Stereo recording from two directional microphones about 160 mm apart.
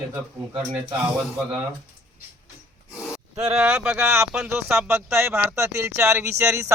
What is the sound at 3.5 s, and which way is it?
Speech, 5° right (ahead or behind).